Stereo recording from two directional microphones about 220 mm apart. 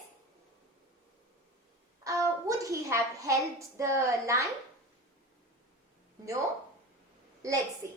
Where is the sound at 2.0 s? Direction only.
15° right (ahead or behind).